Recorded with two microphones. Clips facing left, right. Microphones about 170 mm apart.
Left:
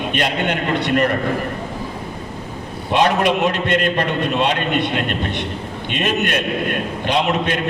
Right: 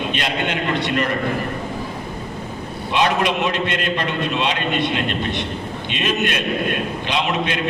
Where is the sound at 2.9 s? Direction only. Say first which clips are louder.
Left 3 dB; 50° left (ahead or behind).